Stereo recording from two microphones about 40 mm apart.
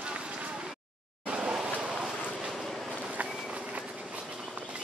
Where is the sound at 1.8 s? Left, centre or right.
Right.